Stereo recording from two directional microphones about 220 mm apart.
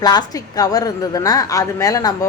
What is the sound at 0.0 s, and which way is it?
A woman's voice, 15° left (ahead or behind).